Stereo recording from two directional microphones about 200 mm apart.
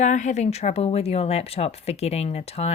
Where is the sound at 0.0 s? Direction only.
35° left (ahead or behind).